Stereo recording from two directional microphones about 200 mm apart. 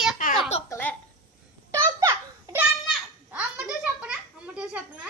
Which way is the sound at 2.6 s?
5° right (ahead or behind).